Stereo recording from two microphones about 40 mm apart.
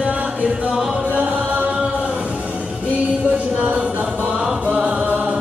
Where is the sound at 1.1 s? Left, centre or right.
Right.